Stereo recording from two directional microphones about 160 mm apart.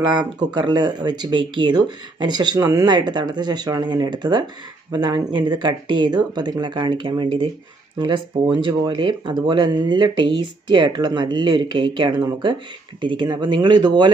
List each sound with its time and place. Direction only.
0.0 s speech: 25° right (ahead or behind)